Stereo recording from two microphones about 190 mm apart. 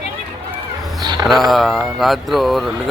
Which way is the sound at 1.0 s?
20° right (ahead or behind).